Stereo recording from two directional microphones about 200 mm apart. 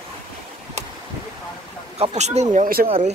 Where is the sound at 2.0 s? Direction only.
35° right (ahead or behind).